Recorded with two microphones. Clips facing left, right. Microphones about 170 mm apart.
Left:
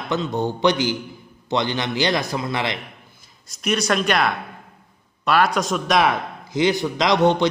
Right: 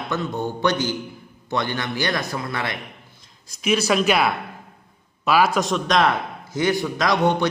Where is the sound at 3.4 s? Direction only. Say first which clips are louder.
Right 1 dB; centre (ahead or behind).